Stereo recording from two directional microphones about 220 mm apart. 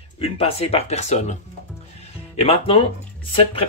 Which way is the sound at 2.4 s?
25° left (ahead or behind).